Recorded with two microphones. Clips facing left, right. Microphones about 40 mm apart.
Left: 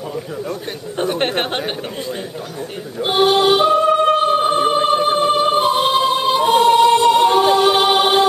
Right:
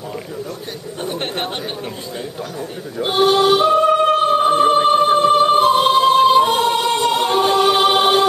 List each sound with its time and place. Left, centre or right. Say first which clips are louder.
0.9 s speech: left 6 dB; left
3.0 s male singing: even; centre
3.7 s music: even; centre